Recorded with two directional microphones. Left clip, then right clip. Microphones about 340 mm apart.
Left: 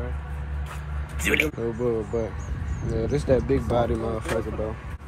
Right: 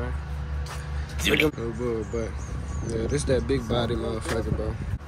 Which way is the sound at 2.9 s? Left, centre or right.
Centre.